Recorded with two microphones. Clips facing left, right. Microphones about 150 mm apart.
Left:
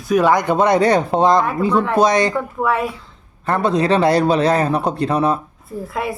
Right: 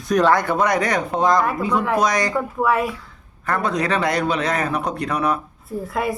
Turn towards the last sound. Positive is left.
turn(degrees=0)  # may be behind; listen again after turning